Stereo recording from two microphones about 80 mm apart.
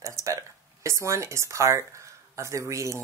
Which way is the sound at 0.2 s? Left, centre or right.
Right.